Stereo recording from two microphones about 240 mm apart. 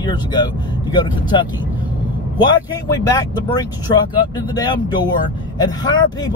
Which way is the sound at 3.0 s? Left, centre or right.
Centre.